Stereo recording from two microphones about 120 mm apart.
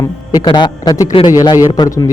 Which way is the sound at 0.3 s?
35° left (ahead or behind).